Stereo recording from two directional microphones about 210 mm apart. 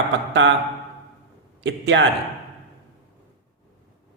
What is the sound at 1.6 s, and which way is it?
Speech, 55° right (ahead or behind).